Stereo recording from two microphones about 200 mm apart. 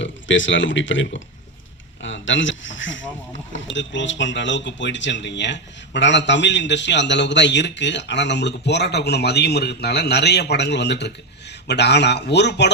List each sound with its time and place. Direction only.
0.0 s speech: 70° left (ahead or behind)